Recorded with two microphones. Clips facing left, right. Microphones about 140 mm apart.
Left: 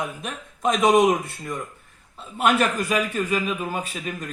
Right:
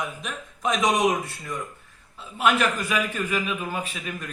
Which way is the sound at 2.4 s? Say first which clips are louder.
Left 2 dB; 40° left (ahead or behind).